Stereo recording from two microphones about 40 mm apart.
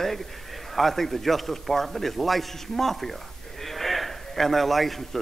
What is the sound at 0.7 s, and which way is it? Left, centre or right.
A man's voice, centre.